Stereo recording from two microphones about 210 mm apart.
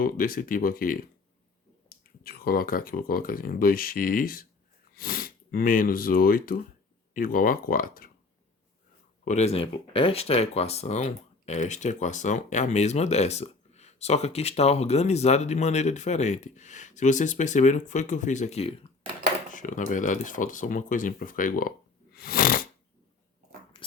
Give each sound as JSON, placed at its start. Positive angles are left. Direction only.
{"t": 0.0, "sound": "speech", "side_deg": 45}
{"t": 9.2, "sound": "speech", "side_deg": 30}
{"t": 22.1, "sound": "snoring", "side_deg": 45}